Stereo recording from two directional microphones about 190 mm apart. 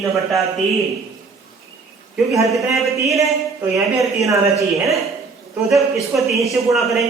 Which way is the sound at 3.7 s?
Centre (ahead or behind).